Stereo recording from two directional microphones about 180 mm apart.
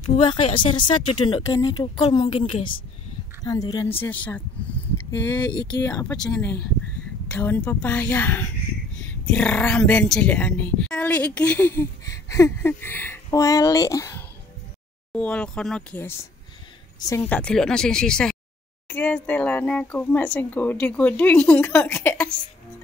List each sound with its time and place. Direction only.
0.2 s speech: 30° left (ahead or behind)
15.1 s a woman's voice: 5° left (ahead or behind)